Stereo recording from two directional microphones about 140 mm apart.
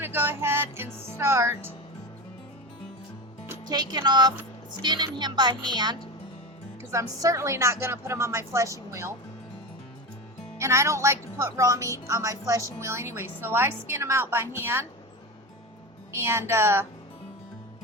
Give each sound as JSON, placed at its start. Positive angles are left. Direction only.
{"t": 0.0, "sound": "music", "side_deg": -15}
{"t": 3.7, "sound": "a woman's voice", "side_deg": -30}
{"t": 10.6, "sound": "a woman's voice", "side_deg": -20}
{"t": 16.1, "sound": "a woman's voice", "side_deg": -20}